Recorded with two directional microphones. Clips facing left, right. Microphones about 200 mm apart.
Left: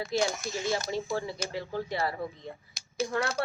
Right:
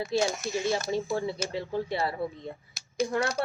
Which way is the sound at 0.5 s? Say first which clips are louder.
Right 3 dB; 15° right (ahead or behind).